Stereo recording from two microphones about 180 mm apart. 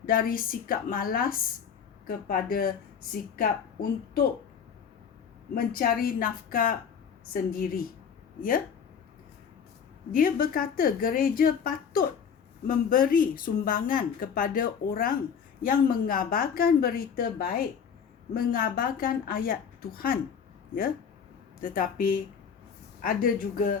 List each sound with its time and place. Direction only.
0.0 s a woman's voice: 50° left (ahead or behind)
5.5 s speech: 55° left (ahead or behind)
10.1 s a woman's voice: 50° left (ahead or behind)
21.6 s speech: 50° left (ahead or behind)